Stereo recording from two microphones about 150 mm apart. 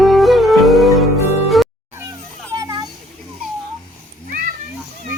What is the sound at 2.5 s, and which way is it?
Children playing, 25° right (ahead or behind).